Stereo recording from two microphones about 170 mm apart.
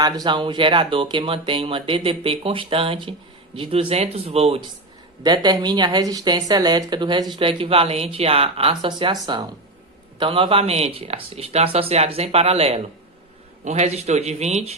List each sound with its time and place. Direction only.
0.0 s speech: 25° right (ahead or behind)
5.2 s speech: 25° right (ahead or behind)